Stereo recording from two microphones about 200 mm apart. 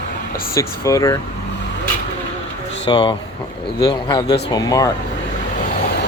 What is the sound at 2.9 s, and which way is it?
Speech, 25° left (ahead or behind).